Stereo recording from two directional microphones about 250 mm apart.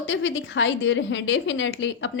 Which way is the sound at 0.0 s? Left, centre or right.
Left.